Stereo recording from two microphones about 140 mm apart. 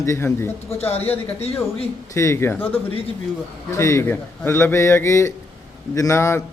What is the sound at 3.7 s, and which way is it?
Speech, 20° left (ahead or behind).